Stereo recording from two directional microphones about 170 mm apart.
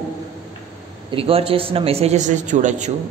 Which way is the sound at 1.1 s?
35° right (ahead or behind).